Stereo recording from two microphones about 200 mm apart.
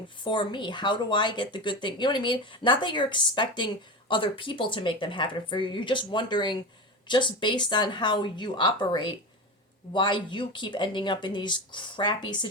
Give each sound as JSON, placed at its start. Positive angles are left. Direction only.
{"t": 0.3, "sound": "speech", "side_deg": 25}